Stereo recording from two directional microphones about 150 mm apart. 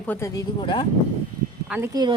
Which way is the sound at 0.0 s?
15° left (ahead or behind).